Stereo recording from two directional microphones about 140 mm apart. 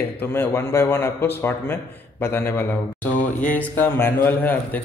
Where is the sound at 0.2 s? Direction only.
15° left (ahead or behind).